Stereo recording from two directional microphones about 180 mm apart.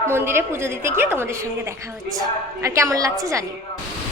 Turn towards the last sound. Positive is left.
turn(degrees=-15)  # may be behind; listen again after turning